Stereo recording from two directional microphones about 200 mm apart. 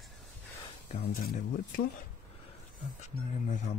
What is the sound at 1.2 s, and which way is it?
Speech, 50° left (ahead or behind).